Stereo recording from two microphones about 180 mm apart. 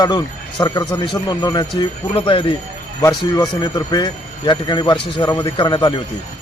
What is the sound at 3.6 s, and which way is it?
Speech, 20° left (ahead or behind).